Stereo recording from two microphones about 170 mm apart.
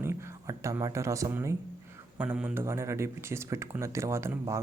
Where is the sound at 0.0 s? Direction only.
15° right (ahead or behind).